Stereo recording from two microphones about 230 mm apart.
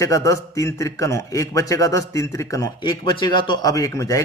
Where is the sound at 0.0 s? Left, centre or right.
Centre.